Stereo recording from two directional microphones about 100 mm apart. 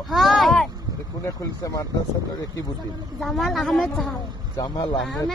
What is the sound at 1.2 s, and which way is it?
Speech, 35° left (ahead or behind).